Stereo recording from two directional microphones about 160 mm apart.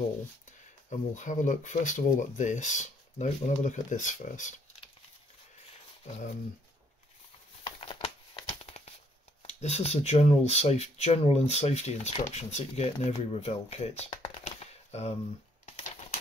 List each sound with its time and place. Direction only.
0.8 s speech: 50° left (ahead or behind)
7.6 s crumpling: 35° left (ahead or behind)
8.5 s a sound: 40° left (ahead or behind)
9.4 s speech: 40° left (ahead or behind)